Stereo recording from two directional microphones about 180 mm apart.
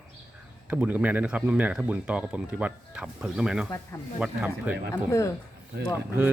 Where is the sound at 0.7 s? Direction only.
10° right (ahead or behind).